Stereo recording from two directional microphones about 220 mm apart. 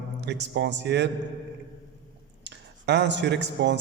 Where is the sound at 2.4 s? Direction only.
50° right (ahead or behind).